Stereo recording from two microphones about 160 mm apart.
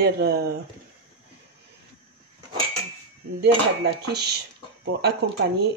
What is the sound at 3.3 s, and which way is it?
Speech, 90° right.